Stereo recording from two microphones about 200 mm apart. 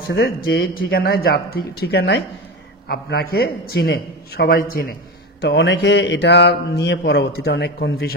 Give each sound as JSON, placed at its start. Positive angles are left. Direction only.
{"t": 0.1, "sound": "a man's voice", "side_deg": 50}
{"t": 5.4, "sound": "speech", "side_deg": 55}